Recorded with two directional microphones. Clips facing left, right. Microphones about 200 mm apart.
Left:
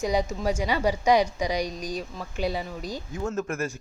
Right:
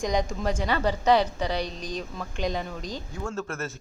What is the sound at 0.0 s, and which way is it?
A woman's voice, 5° left (ahead or behind).